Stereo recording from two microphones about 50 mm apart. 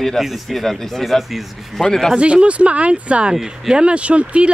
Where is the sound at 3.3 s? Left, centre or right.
Centre.